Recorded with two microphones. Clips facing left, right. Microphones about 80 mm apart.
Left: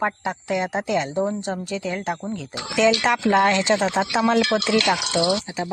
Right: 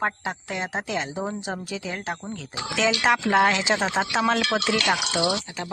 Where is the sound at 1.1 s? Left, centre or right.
Centre.